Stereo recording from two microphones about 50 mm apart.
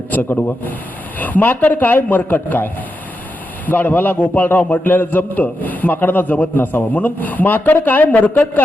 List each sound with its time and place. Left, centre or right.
0.1 s a man's voice: left
3.7 s a man's voice: left